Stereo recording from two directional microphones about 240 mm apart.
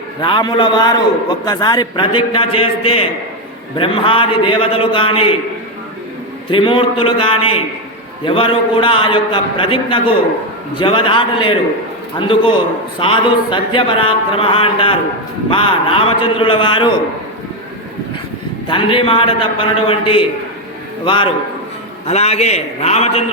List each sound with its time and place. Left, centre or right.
0.2 s speech: centre
6.5 s speech: left
18.7 s speech: left